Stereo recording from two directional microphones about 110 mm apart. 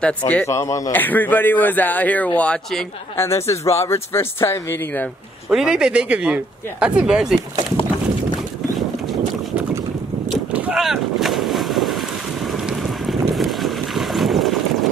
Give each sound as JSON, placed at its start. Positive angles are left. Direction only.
{"t": 0.5, "sound": "speech", "side_deg": 30}
{"t": 0.9, "sound": "a man's voice", "side_deg": 15}
{"t": 3.2, "sound": "speech", "side_deg": 25}
{"t": 5.5, "sound": "speech", "side_deg": -5}
{"t": 10.5, "sound": "boat", "side_deg": -10}